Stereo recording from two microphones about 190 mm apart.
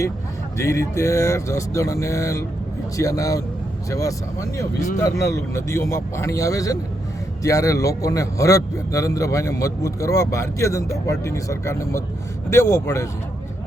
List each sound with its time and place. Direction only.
0.6 s a man's voice: 15° left (ahead or behind)